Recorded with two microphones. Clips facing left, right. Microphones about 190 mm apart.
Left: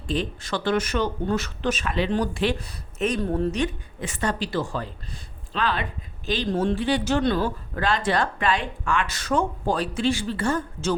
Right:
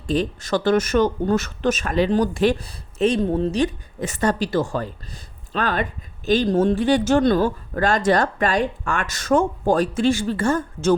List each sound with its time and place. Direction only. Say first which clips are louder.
0.1 s speech: right 6 dB; 40° right (ahead or behind); by 3.6 s 20° right (ahead or behind)
3.6 s speech: right 5 dB; 40° right (ahead or behind)